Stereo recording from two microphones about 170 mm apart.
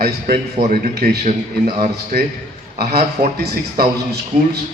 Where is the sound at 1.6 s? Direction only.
65° right (ahead or behind).